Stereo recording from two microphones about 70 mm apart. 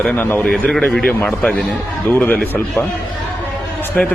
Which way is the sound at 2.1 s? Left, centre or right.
Left.